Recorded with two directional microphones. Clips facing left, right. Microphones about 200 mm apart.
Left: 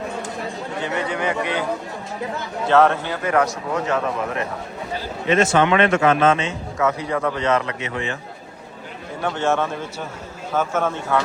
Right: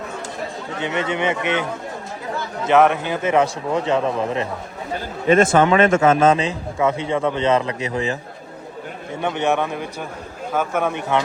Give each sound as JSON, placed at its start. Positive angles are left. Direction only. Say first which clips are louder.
{"t": 0.8, "sound": "speech", "louder": "right 2 dB", "side_deg": -20}
{"t": 2.6, "sound": "speech", "louder": "right 1 dB", "side_deg": -15}
{"t": 5.4, "sound": "a man's voice", "louder": "right 1 dB", "side_deg": -45}
{"t": 9.2, "sound": "a man's voice", "louder": "right 1 dB", "side_deg": -20}